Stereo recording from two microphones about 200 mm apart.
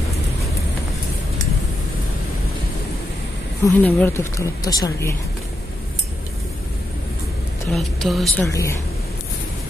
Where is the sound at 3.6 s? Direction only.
10° left (ahead or behind).